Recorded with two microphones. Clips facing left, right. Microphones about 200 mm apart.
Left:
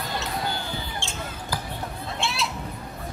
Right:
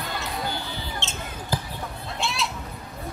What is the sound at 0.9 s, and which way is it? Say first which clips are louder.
Basketball bounce: even; 20° right (ahead or behind).